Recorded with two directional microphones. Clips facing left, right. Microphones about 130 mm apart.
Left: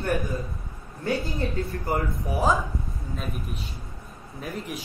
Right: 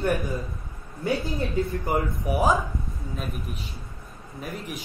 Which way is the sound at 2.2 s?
15° right (ahead or behind).